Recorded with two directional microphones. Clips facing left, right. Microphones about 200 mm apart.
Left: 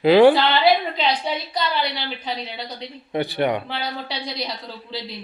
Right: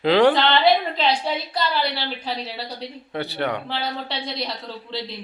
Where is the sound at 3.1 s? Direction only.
15° left (ahead or behind).